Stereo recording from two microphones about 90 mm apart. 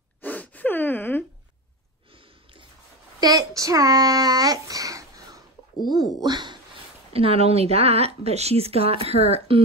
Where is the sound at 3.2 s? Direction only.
45° right (ahead or behind).